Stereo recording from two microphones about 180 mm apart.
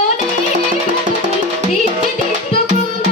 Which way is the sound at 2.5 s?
30° left (ahead or behind).